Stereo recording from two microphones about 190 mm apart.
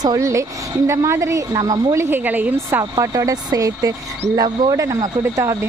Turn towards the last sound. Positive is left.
turn(degrees=-15)  # may be behind; listen again after turning